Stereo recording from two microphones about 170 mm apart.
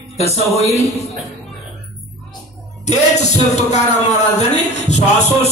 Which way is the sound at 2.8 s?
40° left (ahead or behind).